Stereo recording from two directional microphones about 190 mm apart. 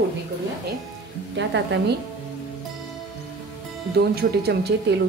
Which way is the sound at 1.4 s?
65° right (ahead or behind).